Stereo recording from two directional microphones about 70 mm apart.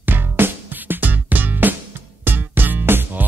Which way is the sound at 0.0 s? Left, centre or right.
Right.